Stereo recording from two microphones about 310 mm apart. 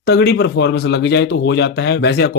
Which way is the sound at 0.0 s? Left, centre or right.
Left.